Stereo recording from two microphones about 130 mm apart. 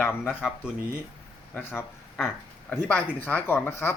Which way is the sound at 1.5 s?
10° left (ahead or behind).